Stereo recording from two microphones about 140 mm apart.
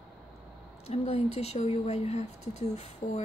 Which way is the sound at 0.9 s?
45° left (ahead or behind).